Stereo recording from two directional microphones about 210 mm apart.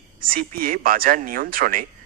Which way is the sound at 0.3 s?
40° right (ahead or behind).